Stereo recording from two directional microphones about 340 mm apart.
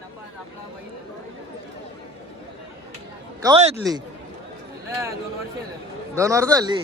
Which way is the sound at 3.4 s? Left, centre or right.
Centre.